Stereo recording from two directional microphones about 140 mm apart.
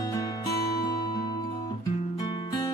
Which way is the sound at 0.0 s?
25° left (ahead or behind).